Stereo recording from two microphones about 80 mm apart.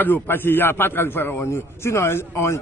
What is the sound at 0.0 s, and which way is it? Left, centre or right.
A man's voice, left.